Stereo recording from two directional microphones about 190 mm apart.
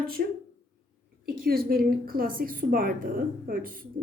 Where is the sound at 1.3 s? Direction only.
50° right (ahead or behind).